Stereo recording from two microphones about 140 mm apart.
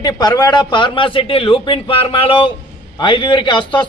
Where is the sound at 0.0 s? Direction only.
30° left (ahead or behind).